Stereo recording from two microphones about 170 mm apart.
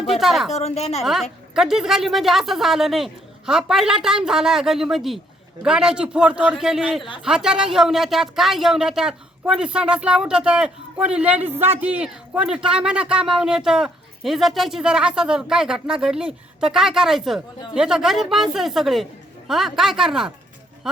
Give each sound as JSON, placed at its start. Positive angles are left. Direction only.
{"t": 0.0, "sound": "a woman's voice", "side_deg": 0}
{"t": 0.5, "sound": "a woman's voice", "side_deg": 40}
{"t": 1.0, "sound": "a man's voice", "side_deg": 0}